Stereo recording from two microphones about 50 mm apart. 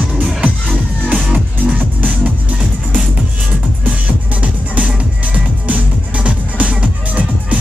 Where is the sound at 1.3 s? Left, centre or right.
Right.